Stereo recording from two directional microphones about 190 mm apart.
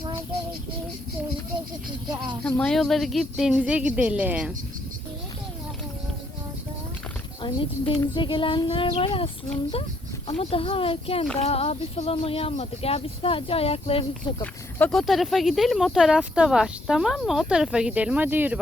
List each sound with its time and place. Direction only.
2.4 s speech: 5° left (ahead or behind)
7.4 s speech: 25° left (ahead or behind)
14.4 s speech: 5° left (ahead or behind); by 18.6 s 10° right (ahead or behind)